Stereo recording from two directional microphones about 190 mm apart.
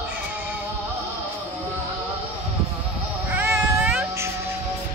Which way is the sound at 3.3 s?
5° right (ahead or behind).